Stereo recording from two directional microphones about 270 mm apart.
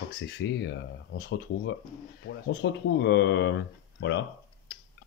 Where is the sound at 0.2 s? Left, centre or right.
Left.